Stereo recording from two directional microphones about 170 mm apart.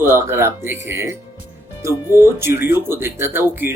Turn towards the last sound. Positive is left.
turn(degrees=-10)  # may be behind; listen again after turning